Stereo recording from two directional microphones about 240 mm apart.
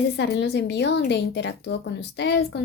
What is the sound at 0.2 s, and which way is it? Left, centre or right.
Speech, left.